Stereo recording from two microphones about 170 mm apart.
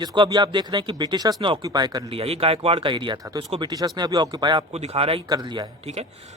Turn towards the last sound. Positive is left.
turn(degrees=-25)  # may be behind; listen again after turning